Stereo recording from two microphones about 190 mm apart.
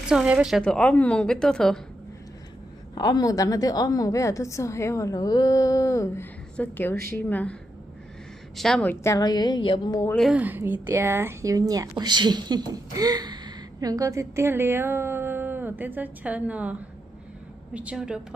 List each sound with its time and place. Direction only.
0.0 s a woman's voice: 5° right (ahead or behind)
2.9 s a woman's voice: 20° left (ahead or behind)
8.5 s a woman's voice: centre (ahead or behind)
9.0 s a woman's voice: 20° left (ahead or behind)
10.1 s speech: 5° right (ahead or behind)
17.7 s a woman's voice: 5° right (ahead or behind)